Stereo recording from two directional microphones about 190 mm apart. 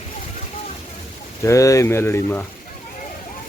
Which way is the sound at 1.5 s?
15° left (ahead or behind).